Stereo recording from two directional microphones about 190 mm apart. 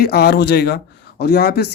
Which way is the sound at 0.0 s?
55° left (ahead or behind).